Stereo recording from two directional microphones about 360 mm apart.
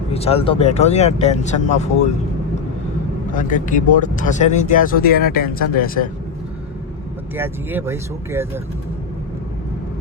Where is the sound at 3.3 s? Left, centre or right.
Left.